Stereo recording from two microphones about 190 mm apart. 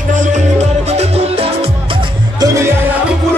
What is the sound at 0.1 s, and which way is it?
Music, 40° right (ahead or behind).